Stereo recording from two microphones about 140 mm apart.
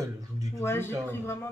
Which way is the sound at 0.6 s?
15° left (ahead or behind).